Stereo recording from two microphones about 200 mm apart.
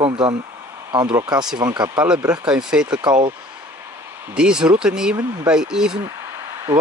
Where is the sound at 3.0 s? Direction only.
25° right (ahead or behind).